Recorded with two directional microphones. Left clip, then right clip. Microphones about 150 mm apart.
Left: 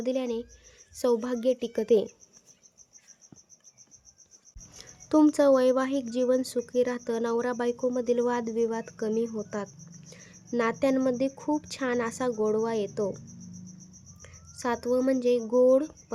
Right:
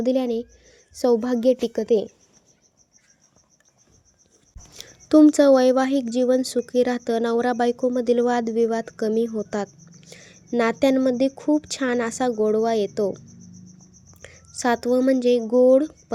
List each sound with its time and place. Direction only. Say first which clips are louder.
0.0 s a woman's voice: right 7 dB; 35° right (ahead or behind)
1.7 s a woman's voice: right 3 dB; 10° right (ahead or behind)
4.8 s speech: right 8 dB; 20° right (ahead or behind)
14.2 s speech: right 9 dB; 30° right (ahead or behind)